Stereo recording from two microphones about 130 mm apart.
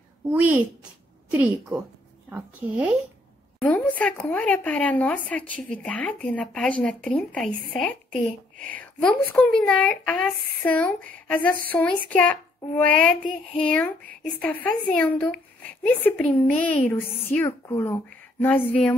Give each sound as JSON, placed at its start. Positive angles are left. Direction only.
{"t": 0.3, "sound": "a child's voice", "side_deg": -10}
{"t": 3.6, "sound": "a woman's voice", "side_deg": 10}